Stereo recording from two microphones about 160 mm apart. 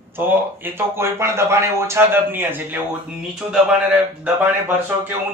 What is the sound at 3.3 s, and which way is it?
A man's voice, centre (ahead or behind).